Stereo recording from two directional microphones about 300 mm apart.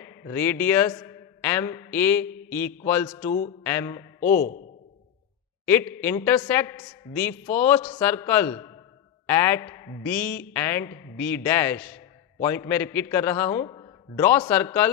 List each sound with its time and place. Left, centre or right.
0.0 s a man's voice: centre
4.2 s speech: left
5.7 s a woman's voice: centre